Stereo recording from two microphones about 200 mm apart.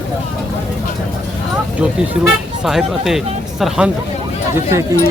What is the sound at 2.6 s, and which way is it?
Speech, centre (ahead or behind).